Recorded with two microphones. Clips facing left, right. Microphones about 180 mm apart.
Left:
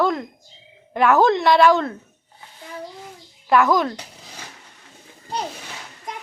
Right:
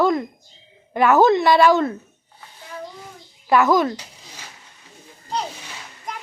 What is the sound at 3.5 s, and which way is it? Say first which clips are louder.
Speech: right 1 dB; centre (ahead or behind).